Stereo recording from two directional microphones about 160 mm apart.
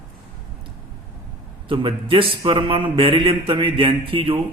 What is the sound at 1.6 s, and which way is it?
Speech, 35° right (ahead or behind).